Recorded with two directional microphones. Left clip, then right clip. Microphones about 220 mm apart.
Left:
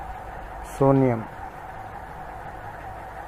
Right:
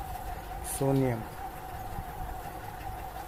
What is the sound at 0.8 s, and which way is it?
Speech, 25° left (ahead or behind).